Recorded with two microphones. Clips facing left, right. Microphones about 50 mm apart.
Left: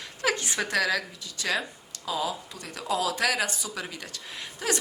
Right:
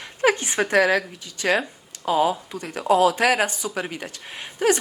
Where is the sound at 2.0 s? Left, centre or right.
Right.